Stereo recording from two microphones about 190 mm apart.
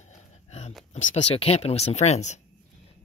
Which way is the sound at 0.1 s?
35° left (ahead or behind).